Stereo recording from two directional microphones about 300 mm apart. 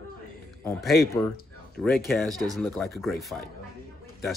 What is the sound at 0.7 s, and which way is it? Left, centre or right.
Speech, centre.